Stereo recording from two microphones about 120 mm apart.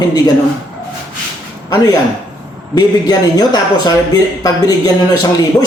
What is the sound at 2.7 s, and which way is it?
A man's voice, 35° left (ahead or behind).